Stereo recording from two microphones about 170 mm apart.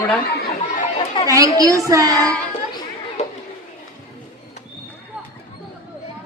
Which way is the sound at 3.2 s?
40° left (ahead or behind).